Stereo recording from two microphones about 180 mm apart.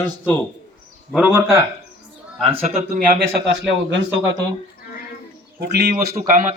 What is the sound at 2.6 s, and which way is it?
Speech, 45° right (ahead or behind).